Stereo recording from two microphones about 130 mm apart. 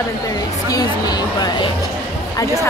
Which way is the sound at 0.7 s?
30° left (ahead or behind).